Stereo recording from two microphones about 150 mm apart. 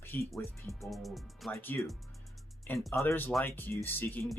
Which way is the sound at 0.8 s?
Centre (ahead or behind).